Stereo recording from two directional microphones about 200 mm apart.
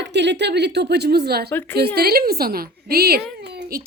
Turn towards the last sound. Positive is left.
turn(degrees=-50)  # may be behind; listen again after turning